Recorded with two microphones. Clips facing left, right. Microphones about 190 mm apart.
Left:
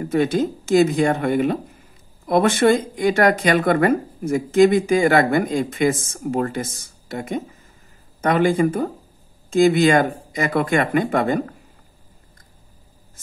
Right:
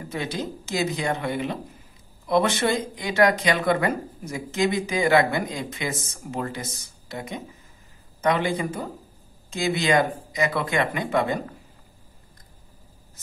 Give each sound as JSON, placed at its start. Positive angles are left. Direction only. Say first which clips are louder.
{"t": 0.0, "sound": "speech", "louder": "left 11 dB", "side_deg": 50}